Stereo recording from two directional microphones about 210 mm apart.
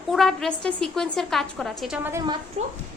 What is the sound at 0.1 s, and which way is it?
A woman's voice, centre (ahead or behind).